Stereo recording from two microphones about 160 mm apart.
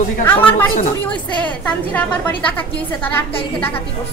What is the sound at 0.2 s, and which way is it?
Speech, 10° left (ahead or behind).